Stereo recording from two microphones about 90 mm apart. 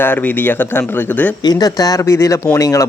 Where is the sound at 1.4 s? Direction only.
50° left (ahead or behind).